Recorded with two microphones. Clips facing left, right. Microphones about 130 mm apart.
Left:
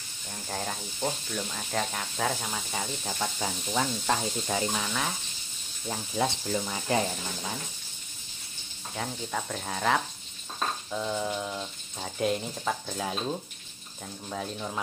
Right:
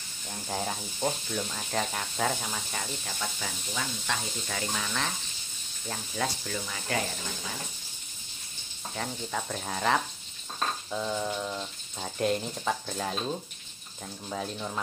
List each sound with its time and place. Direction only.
0.3 s speech: 10° right (ahead or behind); by 2.9 s 10° left (ahead or behind)
3.2 s speech: 35° left (ahead or behind)
4.5 s speech: 20° left (ahead or behind)
4.8 s speech: 10° left (ahead or behind)
8.9 s speech: centre (ahead or behind)